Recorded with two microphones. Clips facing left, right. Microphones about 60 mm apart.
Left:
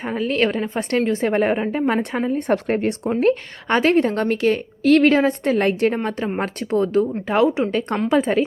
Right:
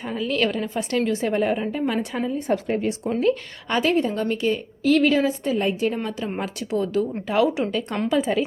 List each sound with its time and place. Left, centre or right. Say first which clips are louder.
0.0 s speech: left 3 dB; left
0.8 s a woman's voice: left 3 dB; left
5.9 s a woman's voice: left 4 dB; left
7.7 s speech: left 4 dB; left